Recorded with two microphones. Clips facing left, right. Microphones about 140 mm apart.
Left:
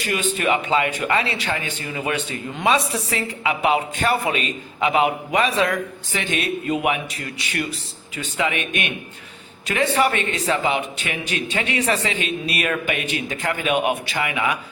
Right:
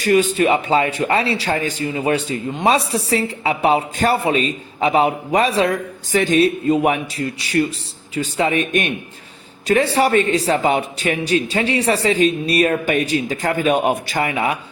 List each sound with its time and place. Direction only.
0.0 s a woman's voice: 40° right (ahead or behind)